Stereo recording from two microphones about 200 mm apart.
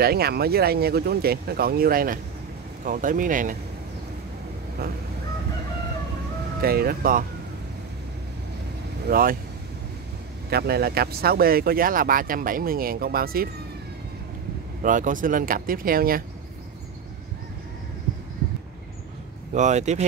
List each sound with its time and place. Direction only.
0.0 s speech: 50° right (ahead or behind)
6.6 s speech: 50° right (ahead or behind)
9.0 s speech: 45° right (ahead or behind)
10.5 s speech: 50° right (ahead or behind)
14.8 s speech: 40° right (ahead or behind)
19.5 s speech: 35° right (ahead or behind)